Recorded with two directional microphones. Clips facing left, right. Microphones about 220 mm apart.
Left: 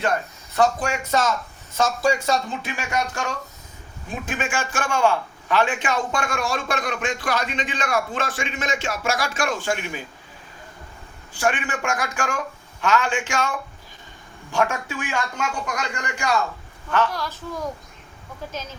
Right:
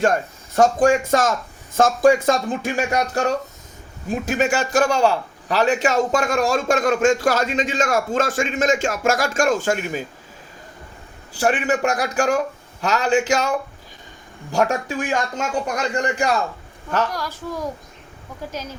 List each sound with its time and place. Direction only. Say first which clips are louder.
0.5 s a man's voice: right 6 dB; 45° right (ahead or behind)
11.3 s speech: right 5 dB; 35° right (ahead or behind)
17.1 s a child's voice: right 2 dB; 10° right (ahead or behind)